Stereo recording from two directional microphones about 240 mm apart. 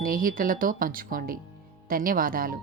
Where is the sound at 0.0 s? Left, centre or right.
Right.